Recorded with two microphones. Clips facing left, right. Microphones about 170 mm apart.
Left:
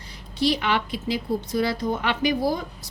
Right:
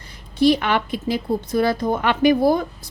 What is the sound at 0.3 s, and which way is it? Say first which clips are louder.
A woman's voice: right 6 dB; 50° right (ahead or behind).